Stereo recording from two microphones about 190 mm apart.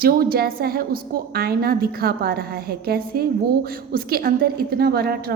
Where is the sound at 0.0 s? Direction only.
50° right (ahead or behind).